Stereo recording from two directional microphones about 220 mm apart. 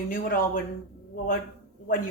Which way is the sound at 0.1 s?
40° left (ahead or behind).